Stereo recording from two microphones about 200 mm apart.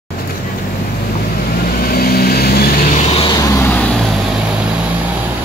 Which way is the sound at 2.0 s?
50° left (ahead or behind).